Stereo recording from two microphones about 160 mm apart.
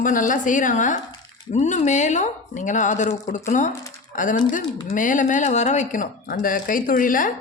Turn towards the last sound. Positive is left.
turn(degrees=55)  # may be behind; listen again after turning